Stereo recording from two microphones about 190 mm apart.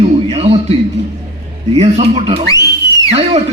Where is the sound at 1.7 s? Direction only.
35° right (ahead or behind).